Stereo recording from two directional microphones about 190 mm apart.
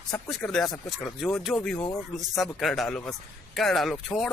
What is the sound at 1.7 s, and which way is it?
Speech, 15° left (ahead or behind).